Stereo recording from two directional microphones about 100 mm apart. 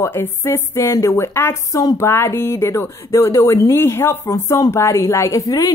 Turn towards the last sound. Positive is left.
turn(degrees=35)  # may be behind; listen again after turning